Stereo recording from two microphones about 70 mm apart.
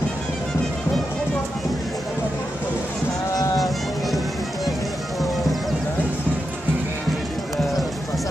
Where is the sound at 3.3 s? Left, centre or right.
Left.